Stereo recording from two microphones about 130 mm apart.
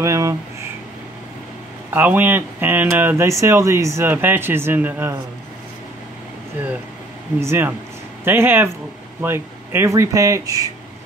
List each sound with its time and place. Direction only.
0.0 s a sound: 25° right (ahead or behind)
1.9 s speech: 15° right (ahead or behind)
7.3 s speech: 20° right (ahead or behind)